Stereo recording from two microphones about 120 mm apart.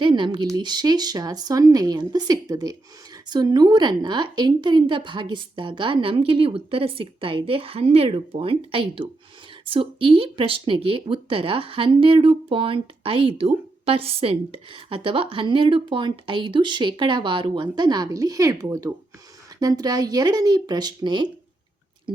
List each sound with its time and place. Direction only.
0.0 s speech: 40° right (ahead or behind)